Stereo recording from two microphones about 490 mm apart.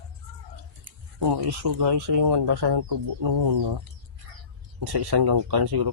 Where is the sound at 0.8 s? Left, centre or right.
Right.